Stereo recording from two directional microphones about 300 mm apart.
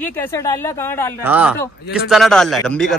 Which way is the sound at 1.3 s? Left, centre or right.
Centre.